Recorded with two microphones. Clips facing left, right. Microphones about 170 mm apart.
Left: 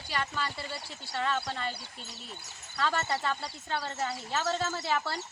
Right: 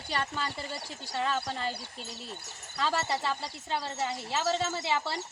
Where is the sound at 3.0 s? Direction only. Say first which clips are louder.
Even; 20° right (ahead or behind).